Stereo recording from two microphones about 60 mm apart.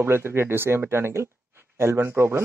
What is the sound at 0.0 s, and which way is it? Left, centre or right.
Speech, right.